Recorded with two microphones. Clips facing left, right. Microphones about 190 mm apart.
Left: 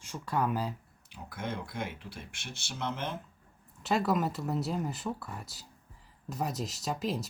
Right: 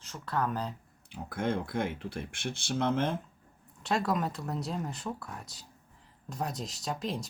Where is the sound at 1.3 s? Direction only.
55° right (ahead or behind).